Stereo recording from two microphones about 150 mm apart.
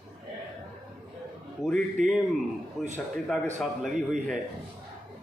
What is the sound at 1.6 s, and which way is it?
Speech, centre (ahead or behind).